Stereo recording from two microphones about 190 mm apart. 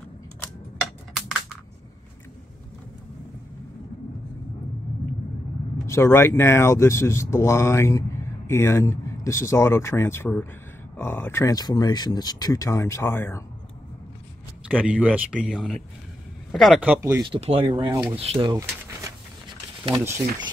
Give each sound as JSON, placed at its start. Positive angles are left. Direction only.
{"t": 5.9, "sound": "speech", "side_deg": 15}
{"t": 14.9, "sound": "speech", "side_deg": -5}
{"t": 17.3, "sound": "speech", "side_deg": -30}